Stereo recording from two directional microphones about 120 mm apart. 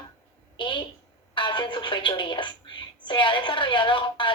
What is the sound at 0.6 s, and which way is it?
A woman's voice, 40° left (ahead or behind).